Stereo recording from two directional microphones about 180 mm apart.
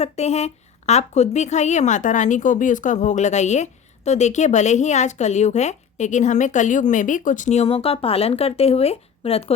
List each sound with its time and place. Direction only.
0.0 s a woman's voice: 35° left (ahead or behind)